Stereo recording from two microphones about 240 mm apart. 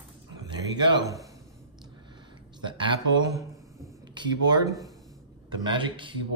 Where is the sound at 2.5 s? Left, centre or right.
Centre.